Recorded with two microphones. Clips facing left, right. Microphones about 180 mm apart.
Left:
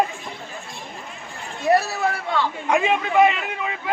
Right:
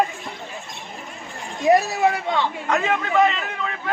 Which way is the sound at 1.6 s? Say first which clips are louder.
Right 3 dB; 15° right (ahead or behind).